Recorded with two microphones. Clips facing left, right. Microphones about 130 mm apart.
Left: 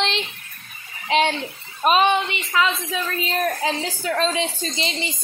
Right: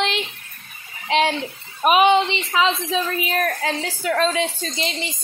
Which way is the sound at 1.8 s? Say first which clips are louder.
Right 3 dB; 15° right (ahead or behind).